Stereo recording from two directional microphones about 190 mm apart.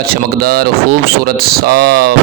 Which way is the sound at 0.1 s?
55° right (ahead or behind).